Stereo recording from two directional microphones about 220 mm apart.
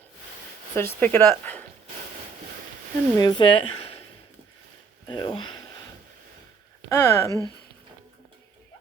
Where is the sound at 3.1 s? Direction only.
20° left (ahead or behind).